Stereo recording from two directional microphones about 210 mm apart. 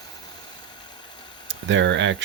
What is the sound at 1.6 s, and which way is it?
Speech, 60° right (ahead or behind).